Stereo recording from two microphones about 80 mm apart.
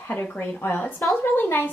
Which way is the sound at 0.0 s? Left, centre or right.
Left.